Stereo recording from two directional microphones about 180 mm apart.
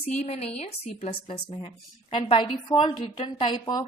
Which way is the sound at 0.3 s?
35° left (ahead or behind).